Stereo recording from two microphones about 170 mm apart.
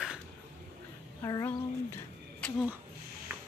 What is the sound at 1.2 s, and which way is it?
Speech, 20° left (ahead or behind).